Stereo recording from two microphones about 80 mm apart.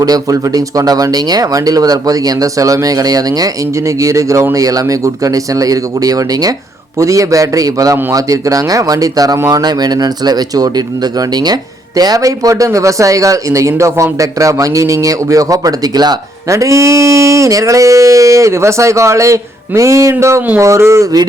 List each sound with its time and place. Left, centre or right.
0.0 s speech: right
16.5 s speech: right